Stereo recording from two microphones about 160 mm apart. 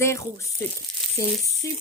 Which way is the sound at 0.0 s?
15° left (ahead or behind).